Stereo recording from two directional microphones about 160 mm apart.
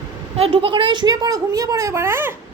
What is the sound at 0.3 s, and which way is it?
A woman's voice, 35° right (ahead or behind).